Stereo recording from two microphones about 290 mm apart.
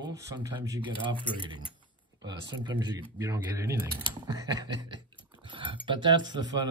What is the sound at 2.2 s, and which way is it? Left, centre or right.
Speech, centre.